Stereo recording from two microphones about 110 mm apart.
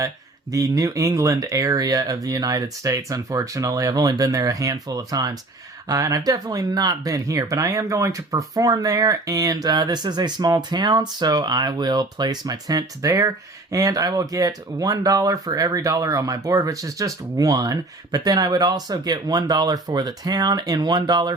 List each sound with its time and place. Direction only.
0.5 s speech: 30° right (ahead or behind)